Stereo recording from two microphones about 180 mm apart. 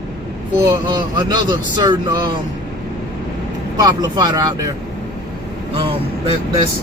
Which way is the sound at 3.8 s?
20° right (ahead or behind).